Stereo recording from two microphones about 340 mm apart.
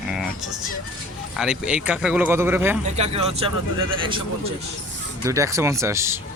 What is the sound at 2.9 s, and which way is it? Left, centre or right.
Speech, centre.